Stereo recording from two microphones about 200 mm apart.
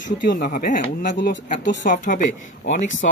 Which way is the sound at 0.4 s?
40° left (ahead or behind).